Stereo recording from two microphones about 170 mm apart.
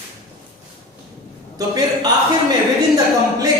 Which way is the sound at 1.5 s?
20° right (ahead or behind).